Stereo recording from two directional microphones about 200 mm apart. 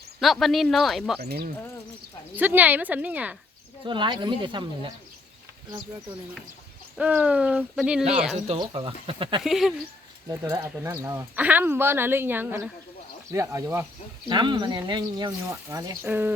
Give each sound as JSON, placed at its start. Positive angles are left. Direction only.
{"t": 0.2, "sound": "hoot", "side_deg": 0}
{"t": 1.2, "sound": "speech", "side_deg": -50}
{"t": 2.3, "sound": "speech", "side_deg": -10}
{"t": 3.8, "sound": "speech", "side_deg": -25}
{"t": 6.9, "sound": "hoot", "side_deg": -5}
{"t": 8.4, "sound": "speech", "side_deg": -25}
{"t": 9.4, "sound": "hoot", "side_deg": 0}
{"t": 10.2, "sound": "speech", "side_deg": -20}